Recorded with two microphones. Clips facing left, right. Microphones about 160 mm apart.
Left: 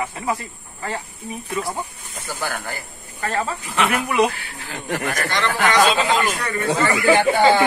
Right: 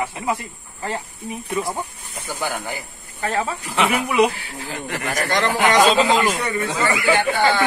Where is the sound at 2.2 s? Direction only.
15° right (ahead or behind).